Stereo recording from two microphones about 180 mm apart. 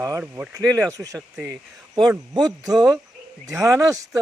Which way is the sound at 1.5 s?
20° right (ahead or behind).